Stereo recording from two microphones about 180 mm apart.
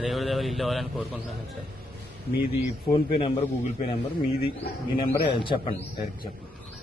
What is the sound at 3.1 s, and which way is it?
Speech, 35° left (ahead or behind).